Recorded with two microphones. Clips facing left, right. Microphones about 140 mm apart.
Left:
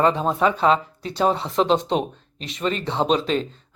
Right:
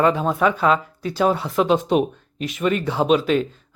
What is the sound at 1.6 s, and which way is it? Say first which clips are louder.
Speech: right 3 dB; 5° right (ahead or behind).